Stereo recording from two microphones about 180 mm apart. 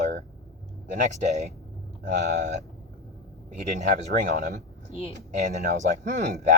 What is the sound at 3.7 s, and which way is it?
Speech, 45° right (ahead or behind).